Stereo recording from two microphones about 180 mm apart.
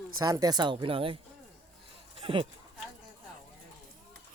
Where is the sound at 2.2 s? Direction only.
30° right (ahead or behind).